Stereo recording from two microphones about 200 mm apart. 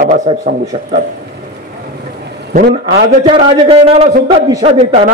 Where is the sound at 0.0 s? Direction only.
40° right (ahead or behind).